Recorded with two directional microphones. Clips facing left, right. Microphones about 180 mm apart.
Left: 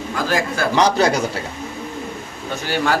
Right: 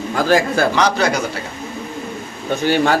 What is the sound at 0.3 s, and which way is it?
Speech, 30° right (ahead or behind).